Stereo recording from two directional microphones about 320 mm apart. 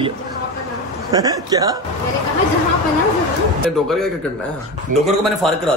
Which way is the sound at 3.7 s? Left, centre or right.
Centre.